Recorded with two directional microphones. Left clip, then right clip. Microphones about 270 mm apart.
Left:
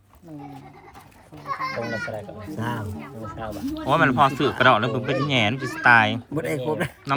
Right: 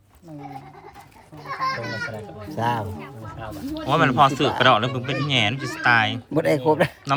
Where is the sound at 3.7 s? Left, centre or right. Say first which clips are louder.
Even; centre.